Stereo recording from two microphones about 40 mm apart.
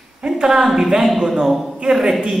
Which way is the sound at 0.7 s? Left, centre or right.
Centre.